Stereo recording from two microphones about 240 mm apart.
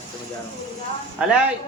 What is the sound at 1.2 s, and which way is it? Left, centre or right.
Speech, centre.